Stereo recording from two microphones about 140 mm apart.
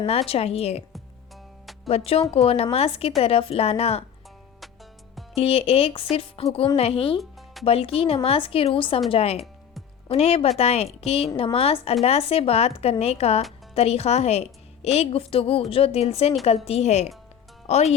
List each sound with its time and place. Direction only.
0.0 s a woman's voice: 45° left (ahead or behind)
2.3 s a woman's voice: 45° left (ahead or behind)
5.3 s a woman's voice: 45° left (ahead or behind)